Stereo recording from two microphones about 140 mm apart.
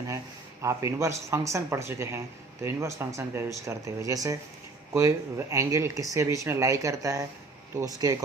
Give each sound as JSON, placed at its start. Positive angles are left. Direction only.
{"t": 0.6, "sound": "speech", "side_deg": -20}